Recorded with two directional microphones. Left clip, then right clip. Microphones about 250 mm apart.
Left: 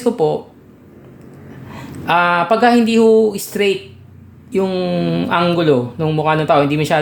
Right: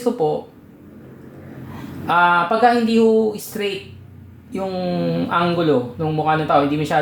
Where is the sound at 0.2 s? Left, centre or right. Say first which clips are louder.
Left 4 dB; left.